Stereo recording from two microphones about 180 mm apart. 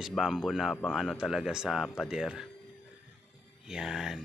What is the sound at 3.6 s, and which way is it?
Speech, 5° right (ahead or behind).